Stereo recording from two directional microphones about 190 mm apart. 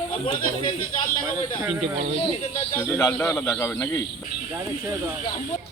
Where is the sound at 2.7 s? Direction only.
10° left (ahead or behind).